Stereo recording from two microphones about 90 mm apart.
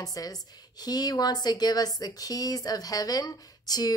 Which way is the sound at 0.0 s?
45° left (ahead or behind).